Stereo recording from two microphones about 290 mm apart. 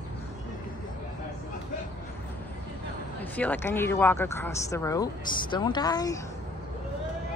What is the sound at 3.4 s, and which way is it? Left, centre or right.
Speech, centre.